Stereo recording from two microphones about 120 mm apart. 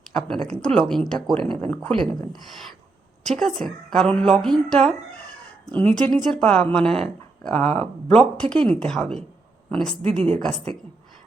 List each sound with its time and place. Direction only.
0.0 s a sound: 5° left (ahead or behind)
0.6 s speech: 5° left (ahead or behind)
3.2 s speech: 5° left (ahead or behind)
10.0 s a woman's voice: 55° right (ahead or behind)